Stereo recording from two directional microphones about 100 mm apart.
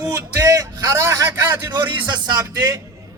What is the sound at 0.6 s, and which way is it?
Speech, 35° right (ahead or behind).